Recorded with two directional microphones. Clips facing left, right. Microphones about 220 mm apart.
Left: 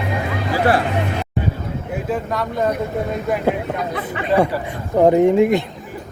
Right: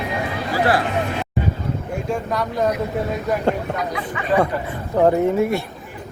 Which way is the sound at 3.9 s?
35° left (ahead or behind).